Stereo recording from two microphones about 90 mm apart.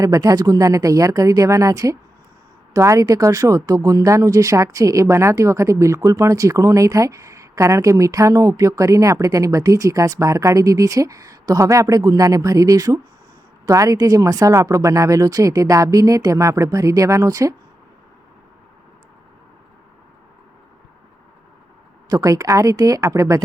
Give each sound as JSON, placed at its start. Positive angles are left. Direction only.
{"t": 0.0, "sound": "speech", "side_deg": -40}
{"t": 22.1, "sound": "speech", "side_deg": -40}